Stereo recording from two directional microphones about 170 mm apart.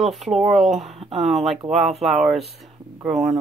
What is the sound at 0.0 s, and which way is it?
Speech, centre (ahead or behind).